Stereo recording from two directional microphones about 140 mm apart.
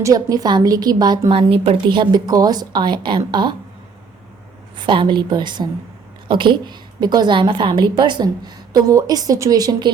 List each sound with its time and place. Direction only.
0.0 s a woman's voice: 25° right (ahead or behind)
1.3 s a woman's voice: 40° right (ahead or behind)
4.8 s a woman's voice: 35° right (ahead or behind)